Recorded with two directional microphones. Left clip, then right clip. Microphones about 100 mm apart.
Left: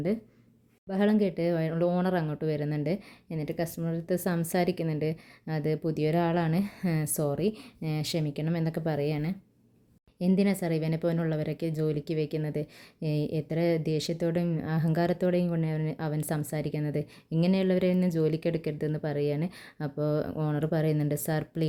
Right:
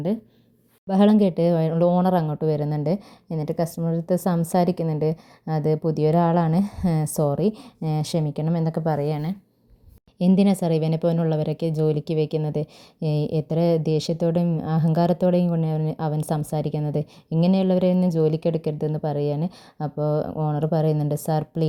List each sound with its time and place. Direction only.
0.9 s speech: 65° right (ahead or behind); by 1.7 s 50° right (ahead or behind)
1.7 s speech: 35° right (ahead or behind); by 9.2 s 15° right (ahead or behind)
10.2 s a woman's voice: 55° right (ahead or behind); by 21.7 s 25° right (ahead or behind)